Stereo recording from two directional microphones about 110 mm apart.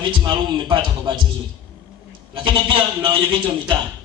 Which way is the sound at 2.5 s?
50° right (ahead or behind).